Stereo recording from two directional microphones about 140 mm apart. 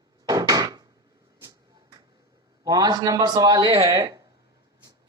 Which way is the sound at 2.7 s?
30° right (ahead or behind).